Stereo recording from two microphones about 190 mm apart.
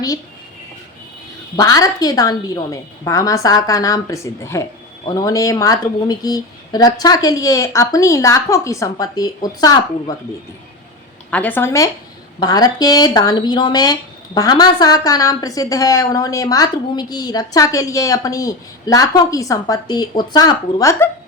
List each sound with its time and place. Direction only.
1.5 s a woman's voice: 20° left (ahead or behind)
11.3 s a woman's voice: 10° left (ahead or behind)